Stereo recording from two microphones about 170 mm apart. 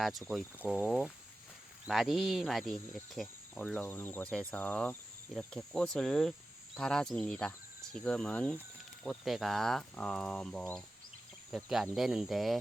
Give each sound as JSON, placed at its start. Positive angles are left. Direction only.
{"t": 0.0, "sound": "speech", "side_deg": 0}